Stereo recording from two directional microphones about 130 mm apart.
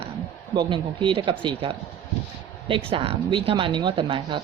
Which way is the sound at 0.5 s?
40° right (ahead or behind).